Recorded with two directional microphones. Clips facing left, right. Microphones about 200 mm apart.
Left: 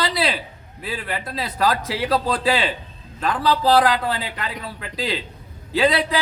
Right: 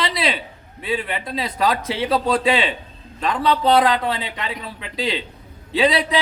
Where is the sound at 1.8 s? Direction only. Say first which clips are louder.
Right 1 dB; 25° right (ahead or behind).